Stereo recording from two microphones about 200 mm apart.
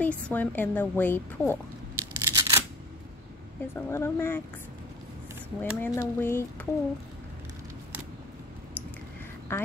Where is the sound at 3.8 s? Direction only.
10° left (ahead or behind).